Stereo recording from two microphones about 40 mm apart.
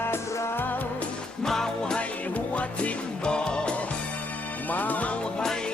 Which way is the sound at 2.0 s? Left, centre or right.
Left.